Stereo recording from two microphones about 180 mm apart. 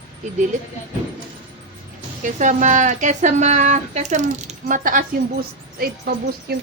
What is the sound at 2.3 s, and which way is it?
Speech, 45° right (ahead or behind).